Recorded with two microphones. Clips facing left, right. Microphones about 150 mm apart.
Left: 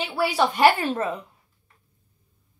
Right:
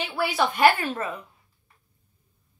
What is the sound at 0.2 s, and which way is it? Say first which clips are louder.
Speech: left 2 dB; 30° left (ahead or behind).